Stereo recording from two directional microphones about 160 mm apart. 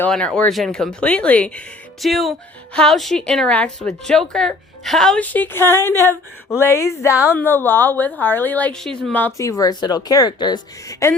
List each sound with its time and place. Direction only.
0.0 s a woman's voice: 5° left (ahead or behind); by 11.1 s 25° left (ahead or behind)